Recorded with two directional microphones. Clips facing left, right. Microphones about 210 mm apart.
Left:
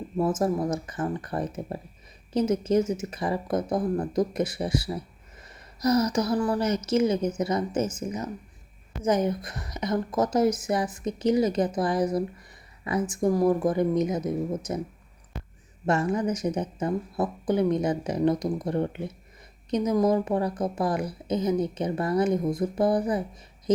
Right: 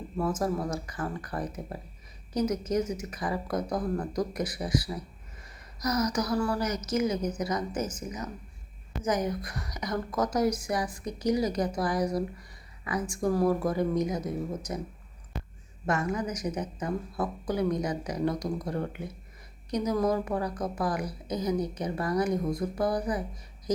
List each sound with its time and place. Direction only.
0.2 s a woman's voice: 25° left (ahead or behind)
15.9 s a woman's voice: 30° left (ahead or behind)